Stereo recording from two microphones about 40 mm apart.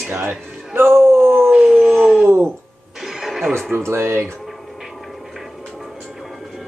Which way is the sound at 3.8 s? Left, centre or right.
Right.